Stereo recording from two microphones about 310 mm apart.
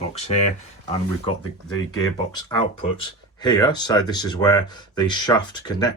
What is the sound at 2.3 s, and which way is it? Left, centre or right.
Speech, centre.